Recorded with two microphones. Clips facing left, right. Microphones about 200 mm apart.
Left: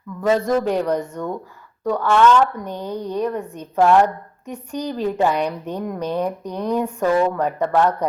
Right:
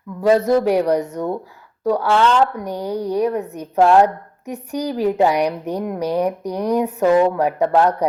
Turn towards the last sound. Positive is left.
turn(degrees=-10)  # may be behind; listen again after turning